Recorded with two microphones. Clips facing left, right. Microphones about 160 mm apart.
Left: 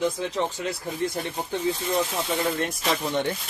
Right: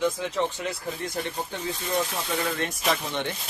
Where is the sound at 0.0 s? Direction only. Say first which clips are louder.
Even; 30° left (ahead or behind).